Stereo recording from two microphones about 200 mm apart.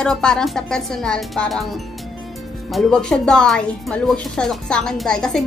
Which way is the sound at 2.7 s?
5° left (ahead or behind).